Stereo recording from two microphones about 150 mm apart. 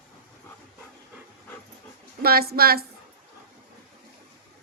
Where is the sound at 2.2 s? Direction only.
90° right.